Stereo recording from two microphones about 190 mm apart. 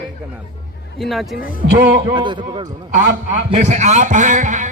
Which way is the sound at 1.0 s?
Centre (ahead or behind).